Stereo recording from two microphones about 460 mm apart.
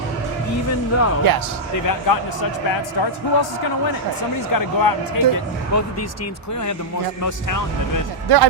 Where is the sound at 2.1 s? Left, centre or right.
Left.